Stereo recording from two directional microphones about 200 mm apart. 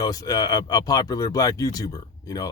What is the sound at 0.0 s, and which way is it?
Speech, 20° left (ahead or behind).